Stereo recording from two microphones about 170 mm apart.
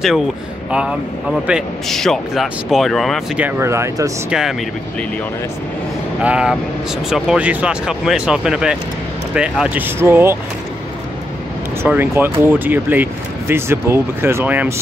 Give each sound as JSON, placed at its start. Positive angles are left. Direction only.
{"t": 0.7, "sound": "speech", "side_deg": -5}
{"t": 3.4, "sound": "speech", "side_deg": -15}
{"t": 4.3, "sound": "speech", "side_deg": -5}
{"t": 6.2, "sound": "speech", "side_deg": -5}
{"t": 11.8, "sound": "speech", "side_deg": -15}